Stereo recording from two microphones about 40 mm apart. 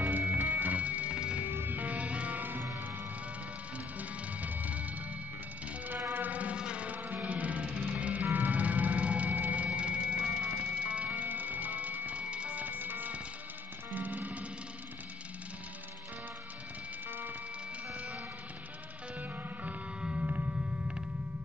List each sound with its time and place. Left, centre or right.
0.3 s music: right
1.5 s music: right
1.8 s music: right
4.3 s music: right
6.1 s music: right
6.5 s music: right
6.9 s music: right
9.7 s music: right
10.4 s music: right
12.2 s music: right
20.0 s a sound: right